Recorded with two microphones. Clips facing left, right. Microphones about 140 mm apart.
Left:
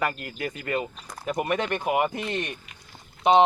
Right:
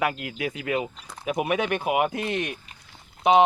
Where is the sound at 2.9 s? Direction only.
Centre (ahead or behind).